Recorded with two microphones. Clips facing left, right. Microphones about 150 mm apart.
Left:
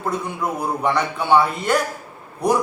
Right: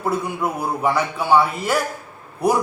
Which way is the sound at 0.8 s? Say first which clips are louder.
Right 1 dB; 5° right (ahead or behind).